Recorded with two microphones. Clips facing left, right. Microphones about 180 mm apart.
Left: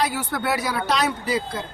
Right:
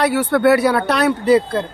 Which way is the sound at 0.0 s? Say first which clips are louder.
Right 10 dB; 70° right (ahead or behind).